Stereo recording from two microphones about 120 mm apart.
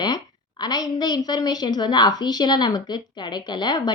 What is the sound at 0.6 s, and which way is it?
A woman's voice, 35° left (ahead or behind).